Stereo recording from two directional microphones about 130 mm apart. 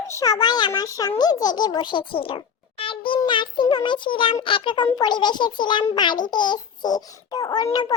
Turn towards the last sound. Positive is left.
turn(degrees=35)  # may be behind; listen again after turning